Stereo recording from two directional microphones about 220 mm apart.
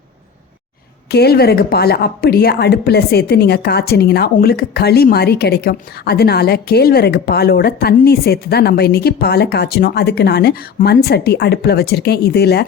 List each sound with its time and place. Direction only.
1.1 s a woman's voice: 45° left (ahead or behind)